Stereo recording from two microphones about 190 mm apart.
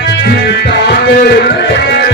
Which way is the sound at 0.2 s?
60° left (ahead or behind).